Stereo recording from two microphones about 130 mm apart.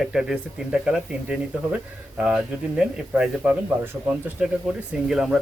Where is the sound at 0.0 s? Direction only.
5° right (ahead or behind).